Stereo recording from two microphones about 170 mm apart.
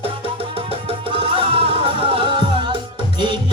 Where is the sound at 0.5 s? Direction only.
35° right (ahead or behind).